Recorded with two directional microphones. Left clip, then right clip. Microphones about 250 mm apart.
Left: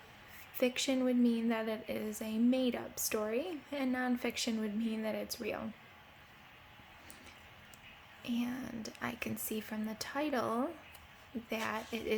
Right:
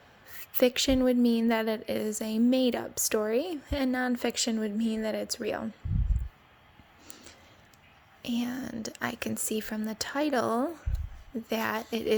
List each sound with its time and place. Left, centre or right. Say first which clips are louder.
0.3 s a woman's voice: right 9 dB; right
8.2 s a woman's voice: right 6 dB; right